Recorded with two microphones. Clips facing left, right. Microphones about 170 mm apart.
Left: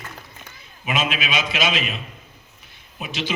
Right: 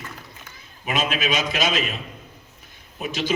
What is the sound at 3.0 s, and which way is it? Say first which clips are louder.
Speech: right 2 dB; 40° right (ahead or behind).